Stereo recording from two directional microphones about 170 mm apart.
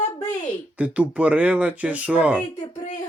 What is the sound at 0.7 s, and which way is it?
Speech, 10° right (ahead or behind).